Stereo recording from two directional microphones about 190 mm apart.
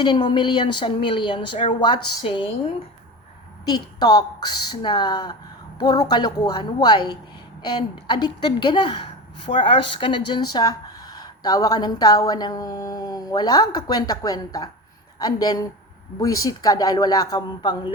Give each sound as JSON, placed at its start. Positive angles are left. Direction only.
{"t": 0.0, "sound": "speech", "side_deg": 25}
{"t": 3.7, "sound": "speech", "side_deg": 20}